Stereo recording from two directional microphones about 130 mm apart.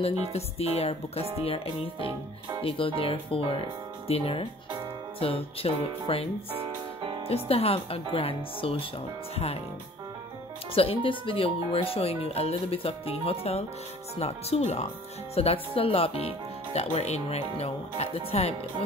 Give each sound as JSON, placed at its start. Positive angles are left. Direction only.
{"t": 0.0, "sound": "speech", "side_deg": 50}
{"t": 6.5, "sound": "music", "side_deg": -45}
{"t": 7.4, "sound": "speech", "side_deg": 50}
{"t": 10.7, "sound": "speech", "side_deg": 45}